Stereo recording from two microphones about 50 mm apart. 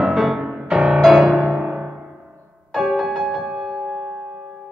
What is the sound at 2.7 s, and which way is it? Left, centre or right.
Music, centre.